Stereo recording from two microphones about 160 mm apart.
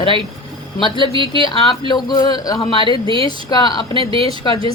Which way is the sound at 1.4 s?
30° left (ahead or behind).